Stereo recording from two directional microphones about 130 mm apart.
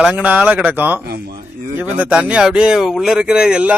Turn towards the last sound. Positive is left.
turn(degrees=-5)  # may be behind; listen again after turning